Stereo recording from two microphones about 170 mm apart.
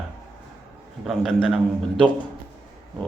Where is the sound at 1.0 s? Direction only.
Centre (ahead or behind).